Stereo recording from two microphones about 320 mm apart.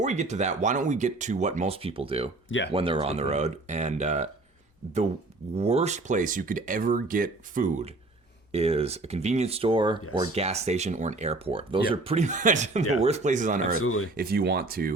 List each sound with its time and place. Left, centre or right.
0.0 s speech: right
2.5 s speech: left
2.7 s speech: centre
5.5 s speech: centre
13.7 s speech: left
14.2 s speech: right